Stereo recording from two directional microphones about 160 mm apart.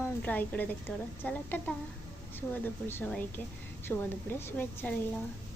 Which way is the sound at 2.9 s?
10° left (ahead or behind).